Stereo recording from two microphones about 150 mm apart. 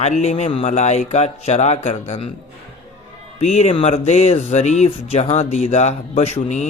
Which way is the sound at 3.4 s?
50° left (ahead or behind).